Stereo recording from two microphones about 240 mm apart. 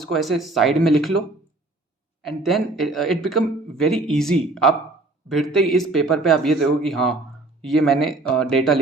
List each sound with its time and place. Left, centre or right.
0.0 s speech: centre
2.2 s speech: centre